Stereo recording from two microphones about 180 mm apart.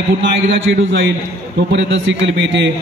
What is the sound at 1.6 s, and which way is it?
A man's voice, 80° right.